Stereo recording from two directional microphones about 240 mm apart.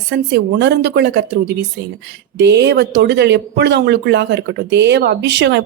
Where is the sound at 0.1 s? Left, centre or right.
Right.